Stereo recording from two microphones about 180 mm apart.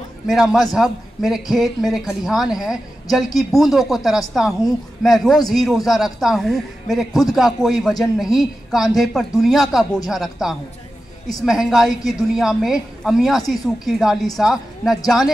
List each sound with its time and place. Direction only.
0.3 s a man's voice: centre (ahead or behind)